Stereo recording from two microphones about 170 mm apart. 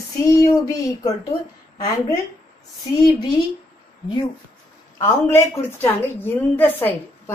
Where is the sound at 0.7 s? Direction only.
20° left (ahead or behind).